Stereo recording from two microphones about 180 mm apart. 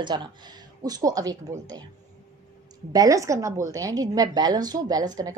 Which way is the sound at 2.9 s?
20° right (ahead or behind).